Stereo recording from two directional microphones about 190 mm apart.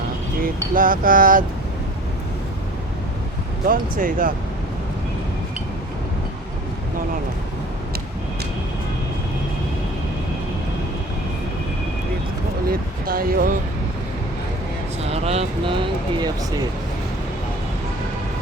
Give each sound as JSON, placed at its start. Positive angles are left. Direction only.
{"t": 0.7, "sound": "speech", "side_deg": -45}
{"t": 3.7, "sound": "speech", "side_deg": -45}
{"t": 12.6, "sound": "speech", "side_deg": -50}
{"t": 15.0, "sound": "vehicle", "side_deg": -30}